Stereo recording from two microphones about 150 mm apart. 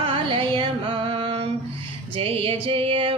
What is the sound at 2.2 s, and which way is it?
Music, 40° right (ahead or behind).